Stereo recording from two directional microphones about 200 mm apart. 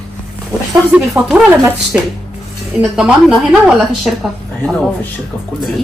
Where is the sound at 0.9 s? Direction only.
5° right (ahead or behind).